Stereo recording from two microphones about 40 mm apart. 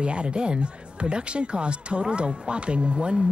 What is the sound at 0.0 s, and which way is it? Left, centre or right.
Speech, right.